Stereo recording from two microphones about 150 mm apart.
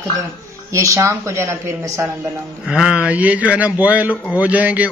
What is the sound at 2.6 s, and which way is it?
Speech, 5° right (ahead or behind).